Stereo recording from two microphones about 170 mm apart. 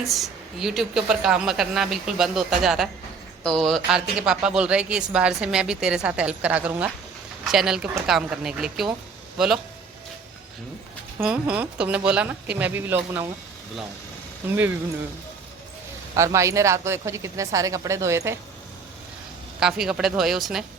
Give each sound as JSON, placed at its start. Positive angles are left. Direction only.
{"t": 0.0, "sound": "speech", "side_deg": 0}
{"t": 11.2, "sound": "speech", "side_deg": -5}
{"t": 16.1, "sound": "speech", "side_deg": -15}
{"t": 19.8, "sound": "speech", "side_deg": -5}